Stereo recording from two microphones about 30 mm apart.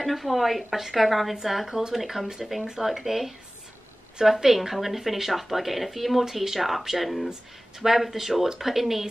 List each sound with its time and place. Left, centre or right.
0.0 s speech: centre
1.7 s speech: centre
2.0 s speech: centre